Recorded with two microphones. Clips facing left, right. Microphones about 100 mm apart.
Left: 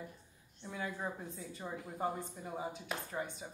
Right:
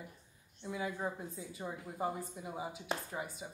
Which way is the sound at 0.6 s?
5° right (ahead or behind).